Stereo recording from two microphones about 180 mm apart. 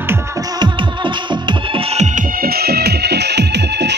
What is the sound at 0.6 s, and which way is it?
Music, 25° right (ahead or behind).